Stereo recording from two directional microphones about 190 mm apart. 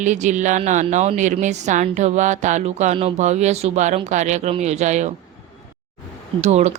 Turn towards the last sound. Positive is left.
turn(degrees=-35)  # may be behind; listen again after turning